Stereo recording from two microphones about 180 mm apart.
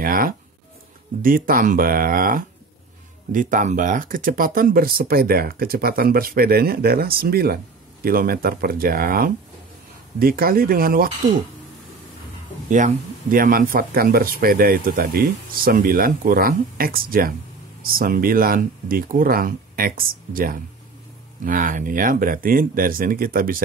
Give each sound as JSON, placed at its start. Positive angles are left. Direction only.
{"t": 0.0, "sound": "speech", "side_deg": -55}
{"t": 12.6, "sound": "speech", "side_deg": -45}